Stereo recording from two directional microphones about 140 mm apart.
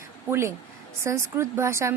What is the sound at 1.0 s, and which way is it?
Speech, 20° right (ahead or behind).